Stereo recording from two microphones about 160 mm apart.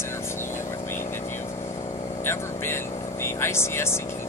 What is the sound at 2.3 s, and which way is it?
Vehicle, 15° left (ahead or behind).